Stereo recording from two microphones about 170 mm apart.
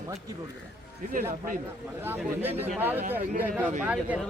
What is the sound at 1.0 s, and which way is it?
Speech, 55° right (ahead or behind).